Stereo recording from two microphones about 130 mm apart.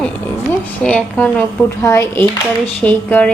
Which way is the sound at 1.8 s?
20° left (ahead or behind).